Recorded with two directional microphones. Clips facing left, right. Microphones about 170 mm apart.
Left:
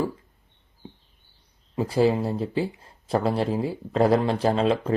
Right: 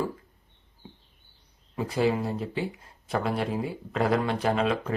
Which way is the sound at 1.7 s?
30° left (ahead or behind).